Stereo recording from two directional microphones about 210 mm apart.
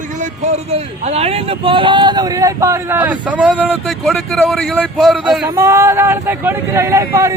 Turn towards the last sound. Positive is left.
turn(degrees=-15)  # may be behind; listen again after turning